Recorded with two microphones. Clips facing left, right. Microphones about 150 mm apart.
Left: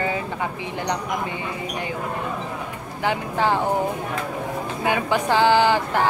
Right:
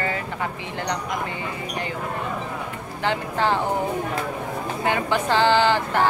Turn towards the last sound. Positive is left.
turn(degrees=15)  # may be behind; listen again after turning